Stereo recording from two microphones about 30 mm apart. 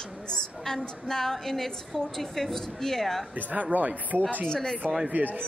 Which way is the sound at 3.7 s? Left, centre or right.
Right.